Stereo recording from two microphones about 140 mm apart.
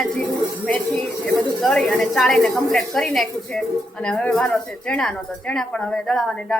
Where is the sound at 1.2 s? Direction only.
Centre (ahead or behind).